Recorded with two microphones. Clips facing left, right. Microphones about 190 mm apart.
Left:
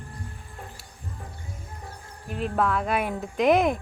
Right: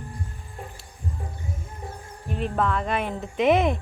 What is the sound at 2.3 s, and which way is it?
Speech, centre (ahead or behind).